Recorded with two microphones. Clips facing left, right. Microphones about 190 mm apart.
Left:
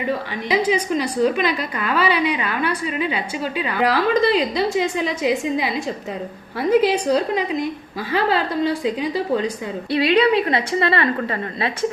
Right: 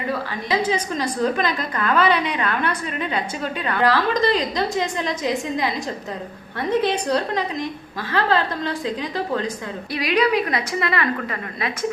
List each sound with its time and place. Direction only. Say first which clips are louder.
0.4 s a woman's voice: left 3 dB; 15° left (ahead or behind)
6.6 s a woman's voice: left 4 dB; 5° left (ahead or behind)
9.9 s a woman's voice: left 4 dB; 30° left (ahead or behind)